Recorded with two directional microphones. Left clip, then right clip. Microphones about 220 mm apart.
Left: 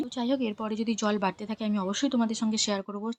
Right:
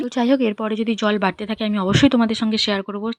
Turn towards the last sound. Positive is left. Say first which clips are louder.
# right 9 dB
turn(degrees=-15)  # may be behind; listen again after turning